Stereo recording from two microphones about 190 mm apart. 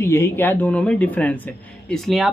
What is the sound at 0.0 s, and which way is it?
Speech, 15° left (ahead or behind).